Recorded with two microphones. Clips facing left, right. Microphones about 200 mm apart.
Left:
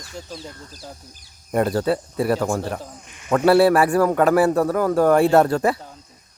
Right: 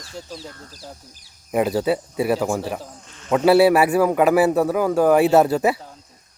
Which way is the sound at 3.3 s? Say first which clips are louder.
Right 1 dB; 5° right (ahead or behind).